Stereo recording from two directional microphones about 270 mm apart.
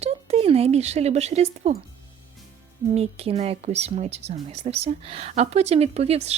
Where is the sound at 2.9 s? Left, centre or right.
Right.